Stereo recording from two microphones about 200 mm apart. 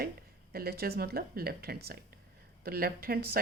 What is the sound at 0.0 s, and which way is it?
Speech, 50° right (ahead or behind).